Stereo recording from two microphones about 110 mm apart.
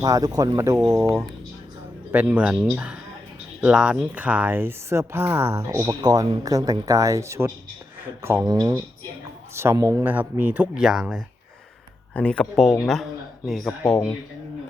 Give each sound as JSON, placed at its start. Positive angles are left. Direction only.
{"t": 0.0, "sound": "speech", "side_deg": -35}
{"t": 2.1, "sound": "a man's voice", "side_deg": -15}
{"t": 5.8, "sound": "speech", "side_deg": -40}
{"t": 8.4, "sound": "speech", "side_deg": -35}
{"t": 10.0, "sound": "a man's voice", "side_deg": -15}
{"t": 12.1, "sound": "speech", "side_deg": 10}